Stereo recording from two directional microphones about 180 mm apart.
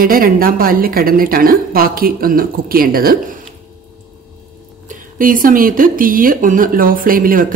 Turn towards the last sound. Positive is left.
turn(degrees=-50)  # may be behind; listen again after turning